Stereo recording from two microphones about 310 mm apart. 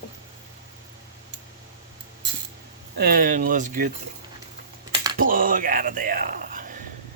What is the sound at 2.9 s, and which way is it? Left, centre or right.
Speech, right.